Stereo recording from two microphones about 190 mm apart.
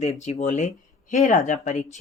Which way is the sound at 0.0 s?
35° left (ahead or behind).